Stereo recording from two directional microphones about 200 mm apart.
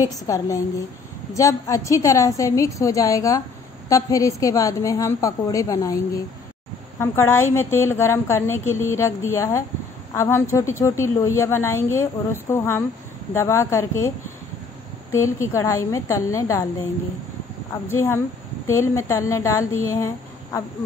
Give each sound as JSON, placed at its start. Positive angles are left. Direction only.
{"t": 0.0, "sound": "a woman's voice", "side_deg": 15}
{"t": 17.8, "sound": "a woman's voice", "side_deg": 10}